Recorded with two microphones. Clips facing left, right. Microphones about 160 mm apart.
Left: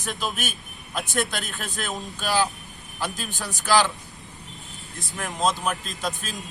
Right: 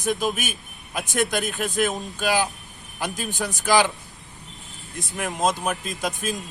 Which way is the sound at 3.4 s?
50° right (ahead or behind).